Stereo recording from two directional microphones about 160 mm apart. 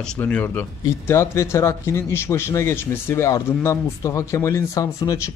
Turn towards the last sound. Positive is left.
turn(degrees=20)  # may be behind; listen again after turning